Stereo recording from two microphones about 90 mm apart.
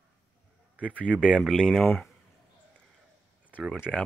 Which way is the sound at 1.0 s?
15° left (ahead or behind).